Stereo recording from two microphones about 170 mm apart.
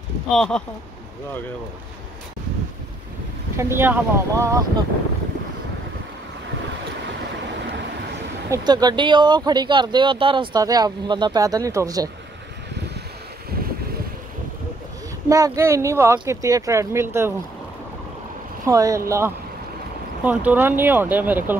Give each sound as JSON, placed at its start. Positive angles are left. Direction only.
{"t": 0.3, "sound": "speech", "side_deg": 5}
{"t": 3.5, "sound": "speech", "side_deg": -15}
{"t": 8.5, "sound": "speech", "side_deg": -25}
{"t": 13.5, "sound": "boat", "side_deg": -60}
{"t": 15.2, "sound": "speech", "side_deg": -20}
{"t": 18.7, "sound": "speech", "side_deg": -20}